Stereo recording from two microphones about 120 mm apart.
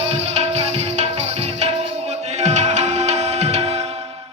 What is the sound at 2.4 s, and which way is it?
Music, 70° right (ahead or behind).